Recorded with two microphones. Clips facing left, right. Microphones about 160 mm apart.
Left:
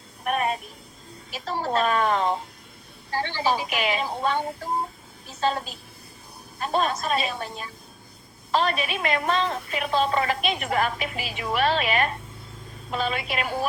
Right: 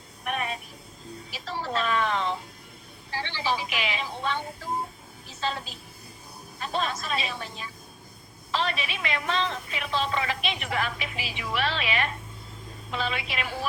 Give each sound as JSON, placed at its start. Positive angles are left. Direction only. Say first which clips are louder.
{"t": 0.3, "sound": "music", "louder": "left 6 dB", "side_deg": 45}
{"t": 1.3, "sound": "a woman's voice", "louder": "left 5 dB", "side_deg": 45}
{"t": 5.4, "sound": "speech", "louder": "left 6 dB", "side_deg": 45}